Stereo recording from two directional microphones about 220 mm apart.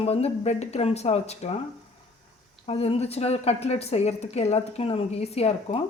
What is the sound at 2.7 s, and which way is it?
A woman's voice, 25° left (ahead or behind).